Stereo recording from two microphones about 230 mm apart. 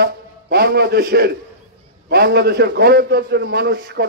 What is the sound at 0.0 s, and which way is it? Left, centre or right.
A man's voice, right.